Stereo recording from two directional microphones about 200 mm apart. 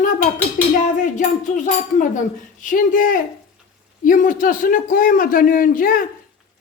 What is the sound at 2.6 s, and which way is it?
Speech, 40° left (ahead or behind).